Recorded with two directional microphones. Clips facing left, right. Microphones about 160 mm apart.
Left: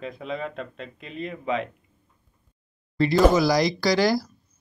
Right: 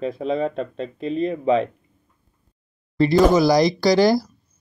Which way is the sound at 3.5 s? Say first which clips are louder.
Right 5 dB; 20° right (ahead or behind).